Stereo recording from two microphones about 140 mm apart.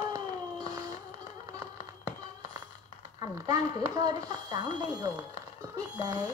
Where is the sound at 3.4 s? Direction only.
25° right (ahead or behind).